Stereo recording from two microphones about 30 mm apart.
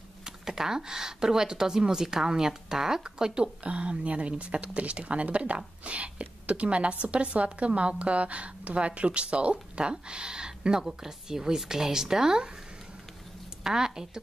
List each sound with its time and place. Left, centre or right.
0.2 s speech: centre
3.6 s speech: right
10.8 s speech: centre
13.7 s speech: centre